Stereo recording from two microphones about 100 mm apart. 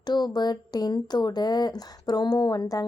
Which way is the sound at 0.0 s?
45° left (ahead or behind).